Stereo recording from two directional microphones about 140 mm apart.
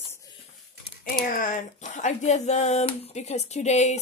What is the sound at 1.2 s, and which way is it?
Speech, 75° left (ahead or behind).